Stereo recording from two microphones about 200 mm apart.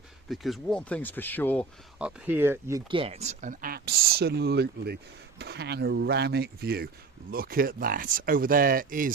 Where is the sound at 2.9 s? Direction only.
25° right (ahead or behind).